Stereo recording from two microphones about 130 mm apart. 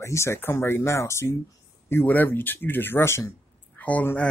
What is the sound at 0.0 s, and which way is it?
Speech, 20° left (ahead or behind).